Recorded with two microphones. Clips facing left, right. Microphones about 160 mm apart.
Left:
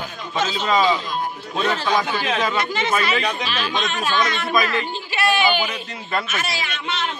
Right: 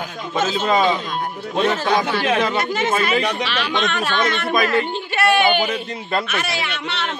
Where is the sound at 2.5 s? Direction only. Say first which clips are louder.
Right 2 dB; 50° right (ahead or behind).